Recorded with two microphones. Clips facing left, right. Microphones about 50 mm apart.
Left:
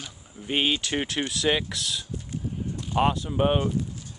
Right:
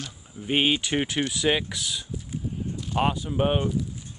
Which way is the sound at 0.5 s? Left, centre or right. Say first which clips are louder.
Right 2 dB; centre.